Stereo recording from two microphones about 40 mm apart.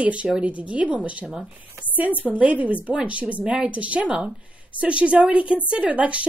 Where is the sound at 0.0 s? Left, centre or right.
Right.